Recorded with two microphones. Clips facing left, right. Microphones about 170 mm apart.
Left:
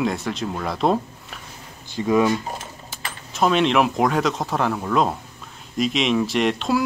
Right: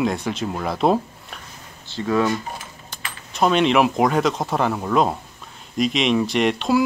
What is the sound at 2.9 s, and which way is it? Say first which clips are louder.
Keys jangling: even; 5° left (ahead or behind).